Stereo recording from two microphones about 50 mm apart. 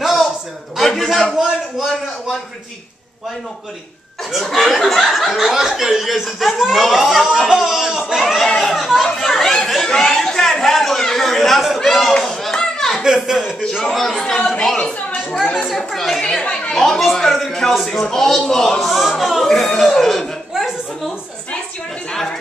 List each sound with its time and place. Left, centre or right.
0.0 s a sound: centre
0.7 s speech: centre
4.3 s speech: centre
7.3 s chatter: centre
12.1 s a sound: centre
13.0 s a man's voice: centre
13.8 s a man's voice: centre